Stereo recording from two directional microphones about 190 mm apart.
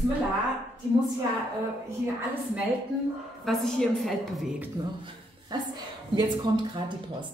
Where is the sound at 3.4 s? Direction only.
Centre (ahead or behind).